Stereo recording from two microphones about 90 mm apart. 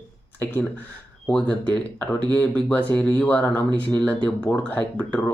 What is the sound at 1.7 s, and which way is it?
Speech, 15° left (ahead or behind).